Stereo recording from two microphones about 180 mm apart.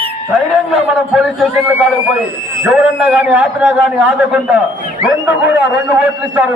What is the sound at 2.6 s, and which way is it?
A man's voice, 5° right (ahead or behind).